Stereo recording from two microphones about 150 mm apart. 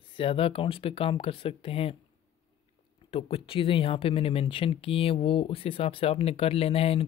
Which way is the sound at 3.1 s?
40° left (ahead or behind).